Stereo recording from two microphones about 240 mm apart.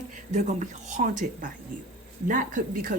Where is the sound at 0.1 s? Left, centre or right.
Right.